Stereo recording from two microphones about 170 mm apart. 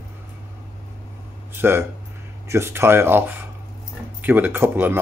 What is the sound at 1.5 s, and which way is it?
Speech, 15° right (ahead or behind).